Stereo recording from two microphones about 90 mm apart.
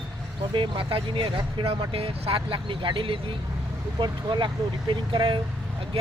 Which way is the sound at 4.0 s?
60° right (ahead or behind).